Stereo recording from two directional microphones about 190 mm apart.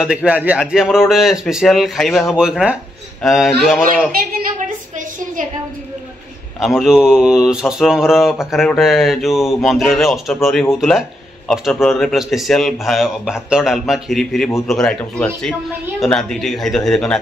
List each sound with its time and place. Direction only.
0.0 s mantra: 5° right (ahead or behind)
4.2 s a sound: 50° right (ahead or behind)
6.6 s mantra: 5° right (ahead or behind)